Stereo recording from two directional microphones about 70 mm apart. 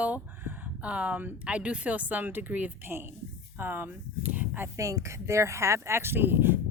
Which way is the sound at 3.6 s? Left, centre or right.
Right.